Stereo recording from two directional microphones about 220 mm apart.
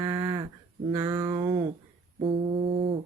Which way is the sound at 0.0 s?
15° right (ahead or behind).